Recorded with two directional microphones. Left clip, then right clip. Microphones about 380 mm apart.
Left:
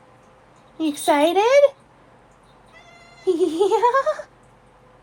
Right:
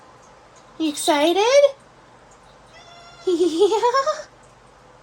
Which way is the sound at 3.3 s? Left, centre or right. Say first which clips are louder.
Right 1 dB; centre.